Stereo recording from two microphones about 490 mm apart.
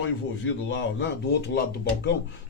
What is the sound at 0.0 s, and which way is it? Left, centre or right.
Speech, left.